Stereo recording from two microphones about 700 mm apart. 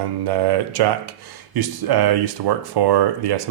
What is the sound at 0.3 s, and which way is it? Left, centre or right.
Speech, right.